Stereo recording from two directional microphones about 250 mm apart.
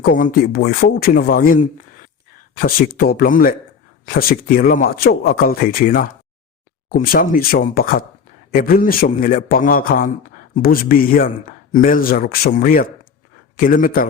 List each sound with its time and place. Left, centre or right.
0.0 s speech: left